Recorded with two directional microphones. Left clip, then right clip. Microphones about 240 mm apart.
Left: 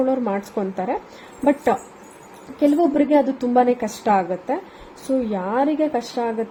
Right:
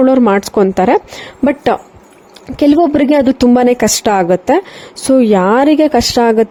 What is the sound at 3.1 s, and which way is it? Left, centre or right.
A woman's voice, right.